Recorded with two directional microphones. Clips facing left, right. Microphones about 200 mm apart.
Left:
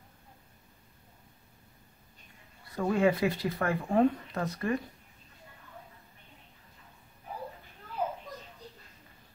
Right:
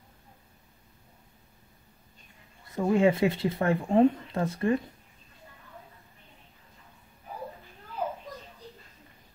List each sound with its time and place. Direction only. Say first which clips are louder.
2.7 s speech: right 3 dB; 20° right (ahead or behind)